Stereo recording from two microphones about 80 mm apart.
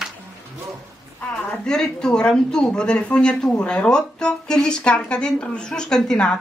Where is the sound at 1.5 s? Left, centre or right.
Centre.